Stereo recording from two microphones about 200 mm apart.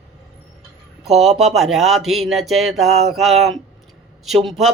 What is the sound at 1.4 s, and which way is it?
A man's voice, centre (ahead or behind).